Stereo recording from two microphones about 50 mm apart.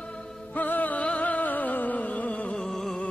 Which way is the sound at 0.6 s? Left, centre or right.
Left.